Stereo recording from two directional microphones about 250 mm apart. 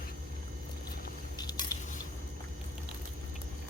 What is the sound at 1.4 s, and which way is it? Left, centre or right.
Squish, centre.